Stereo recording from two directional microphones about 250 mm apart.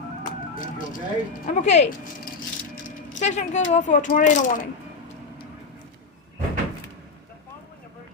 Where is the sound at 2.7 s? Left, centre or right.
Left.